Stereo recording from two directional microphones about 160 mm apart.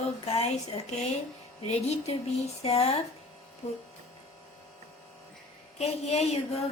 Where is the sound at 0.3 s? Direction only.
40° left (ahead or behind).